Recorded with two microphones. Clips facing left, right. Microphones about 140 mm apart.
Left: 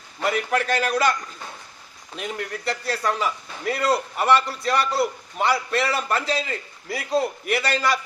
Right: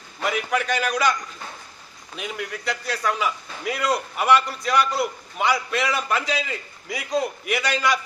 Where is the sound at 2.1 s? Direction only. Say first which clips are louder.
Left 1 dB; 5° right (ahead or behind).